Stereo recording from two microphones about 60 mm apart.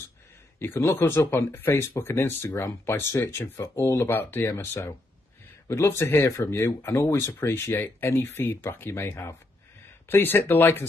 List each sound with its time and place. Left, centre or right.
0.7 s speech: left
3.6 s speech: left
4.1 s speech: left